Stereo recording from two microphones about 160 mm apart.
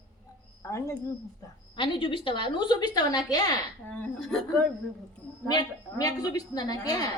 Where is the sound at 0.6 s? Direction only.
20° left (ahead or behind).